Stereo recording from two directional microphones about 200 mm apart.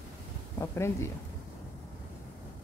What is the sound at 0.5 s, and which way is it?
Speech, 15° left (ahead or behind).